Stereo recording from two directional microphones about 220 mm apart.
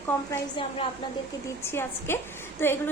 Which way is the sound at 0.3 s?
20° left (ahead or behind).